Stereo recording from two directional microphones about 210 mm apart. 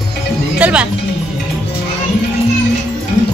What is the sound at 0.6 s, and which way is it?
Speech, 5° right (ahead or behind).